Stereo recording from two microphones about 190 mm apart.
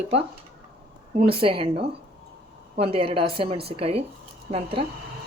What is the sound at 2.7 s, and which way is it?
A woman's voice, 30° right (ahead or behind).